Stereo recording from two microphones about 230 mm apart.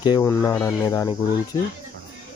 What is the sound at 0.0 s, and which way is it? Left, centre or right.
Speech, centre.